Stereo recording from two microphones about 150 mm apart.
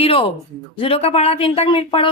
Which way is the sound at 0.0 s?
35° left (ahead or behind).